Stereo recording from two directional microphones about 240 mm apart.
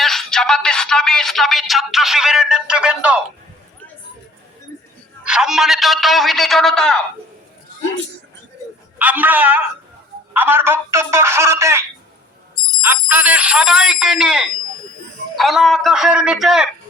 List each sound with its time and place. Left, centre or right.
0.0 s speech: centre
5.2 s speech: centre
9.0 s speech: centre